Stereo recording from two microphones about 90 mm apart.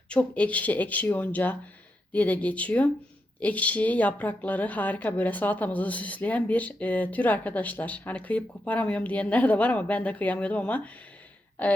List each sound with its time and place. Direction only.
0.1 s a woman's voice: 15° left (ahead or behind)